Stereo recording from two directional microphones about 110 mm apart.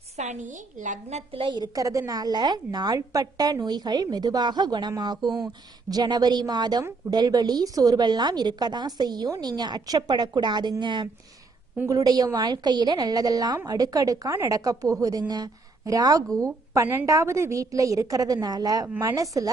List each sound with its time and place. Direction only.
0.2 s a woman's voice: 90° right
1.4 s a woman's voice: 45° right (ahead or behind)